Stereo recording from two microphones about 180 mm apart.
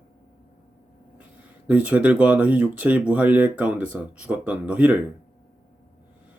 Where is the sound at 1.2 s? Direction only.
10° right (ahead or behind).